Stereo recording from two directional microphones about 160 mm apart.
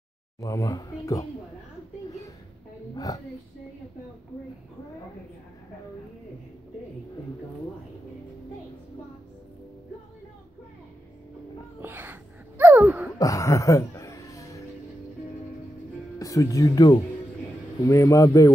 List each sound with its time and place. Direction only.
0.4 s speech: 20° left (ahead or behind)
11.8 s wail: 15° right (ahead or behind)
13.2 s a sound: 20° left (ahead or behind)
16.2 s speech: 20° left (ahead or behind)